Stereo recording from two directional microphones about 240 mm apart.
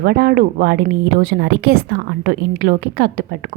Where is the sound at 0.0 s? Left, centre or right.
Right.